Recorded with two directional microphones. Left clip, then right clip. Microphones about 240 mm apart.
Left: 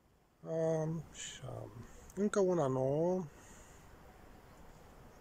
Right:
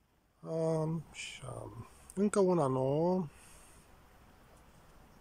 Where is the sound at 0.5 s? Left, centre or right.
Centre.